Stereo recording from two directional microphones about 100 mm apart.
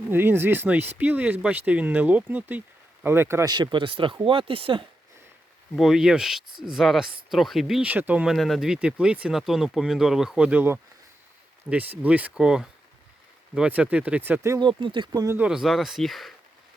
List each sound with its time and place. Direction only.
0.1 s speech: 20° right (ahead or behind)
3.4 s speech: 45° right (ahead or behind)
5.7 s speech: 5° right (ahead or behind)
7.9 s speech: 15° right (ahead or behind)
8.3 s speech: centre (ahead or behind); by 14.5 s 20° right (ahead or behind)
14.6 s speech: 55° right (ahead or behind)
15.4 s speech: 5° right (ahead or behind)